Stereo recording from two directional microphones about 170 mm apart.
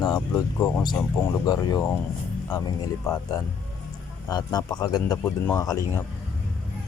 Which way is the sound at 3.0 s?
20° left (ahead or behind).